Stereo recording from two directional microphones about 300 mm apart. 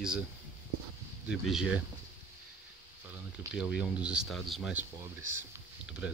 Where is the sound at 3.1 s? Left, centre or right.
Centre.